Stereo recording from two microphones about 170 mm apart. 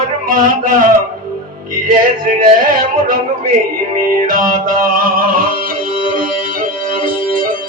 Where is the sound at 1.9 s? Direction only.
50° right (ahead or behind).